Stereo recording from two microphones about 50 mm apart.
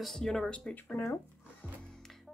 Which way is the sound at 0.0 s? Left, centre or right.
Centre.